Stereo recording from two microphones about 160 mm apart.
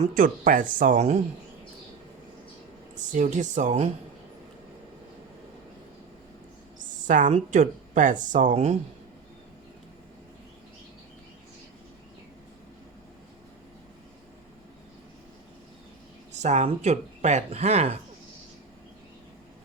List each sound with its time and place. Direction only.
0.1 s speech: 60° right (ahead or behind)
3.1 s speech: 50° right (ahead or behind)
6.7 s speech: 55° right (ahead or behind)
16.4 s speech: 45° right (ahead or behind)